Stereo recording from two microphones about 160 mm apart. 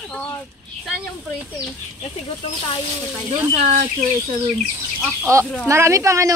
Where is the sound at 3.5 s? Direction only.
45° right (ahead or behind).